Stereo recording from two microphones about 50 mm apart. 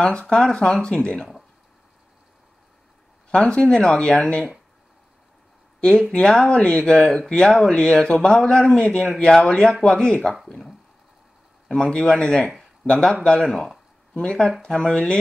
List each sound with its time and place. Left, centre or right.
0.0 s speech: centre
3.3 s speech: centre
5.8 s speech: centre
11.7 s speech: centre
13.5 s speech: centre
14.1 s speech: centre
14.8 s speech: centre